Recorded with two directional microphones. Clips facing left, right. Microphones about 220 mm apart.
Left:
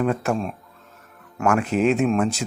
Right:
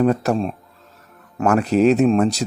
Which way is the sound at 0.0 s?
35° right (ahead or behind).